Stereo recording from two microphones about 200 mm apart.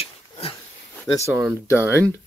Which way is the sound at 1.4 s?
10° right (ahead or behind).